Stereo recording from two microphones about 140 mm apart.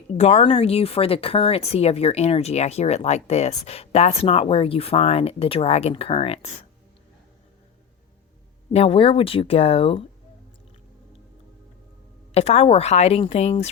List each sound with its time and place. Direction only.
0.1 s speech: 50° left (ahead or behind)
8.7 s speech: 45° left (ahead or behind)
12.3 s speech: 45° left (ahead or behind)